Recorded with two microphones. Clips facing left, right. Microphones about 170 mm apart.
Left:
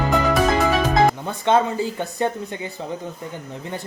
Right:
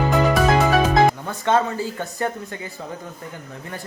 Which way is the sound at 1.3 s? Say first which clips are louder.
Left 1 dB; 15° left (ahead or behind).